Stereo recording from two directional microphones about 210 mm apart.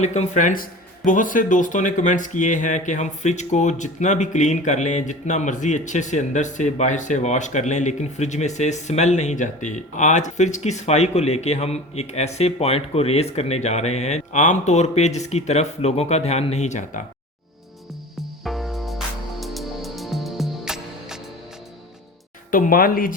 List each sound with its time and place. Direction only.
0.0 s speech: 35° left (ahead or behind)
18.4 s music: centre (ahead or behind)
22.5 s speech: 40° left (ahead or behind)